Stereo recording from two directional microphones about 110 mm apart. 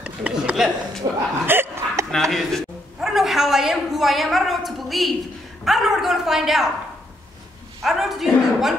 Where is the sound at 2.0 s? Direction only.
5° left (ahead or behind).